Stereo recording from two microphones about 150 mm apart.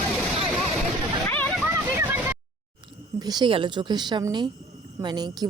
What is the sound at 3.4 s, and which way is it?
Speech, 35° right (ahead or behind).